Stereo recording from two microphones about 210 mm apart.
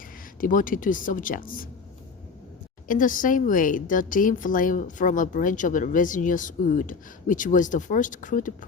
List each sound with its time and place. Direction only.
0.3 s speech: 40° left (ahead or behind)
2.8 s speech: 40° left (ahead or behind)